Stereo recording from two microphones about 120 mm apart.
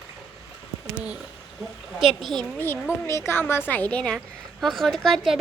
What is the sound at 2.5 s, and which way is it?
A woman's voice, 20° left (ahead or behind).